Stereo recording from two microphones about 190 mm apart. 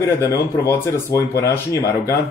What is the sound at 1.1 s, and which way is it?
Speech, 15° left (ahead or behind).